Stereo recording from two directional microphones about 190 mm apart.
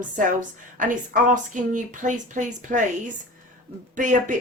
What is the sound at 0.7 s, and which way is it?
A woman's voice, 45° right (ahead or behind).